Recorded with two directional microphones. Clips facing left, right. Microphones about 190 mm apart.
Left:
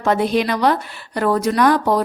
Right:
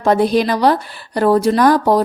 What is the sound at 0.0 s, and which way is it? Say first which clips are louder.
A woman's voice: right 4 dB; 35° right (ahead or behind).